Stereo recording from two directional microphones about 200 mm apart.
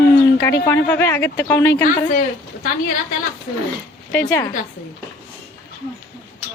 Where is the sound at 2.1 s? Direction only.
45° left (ahead or behind).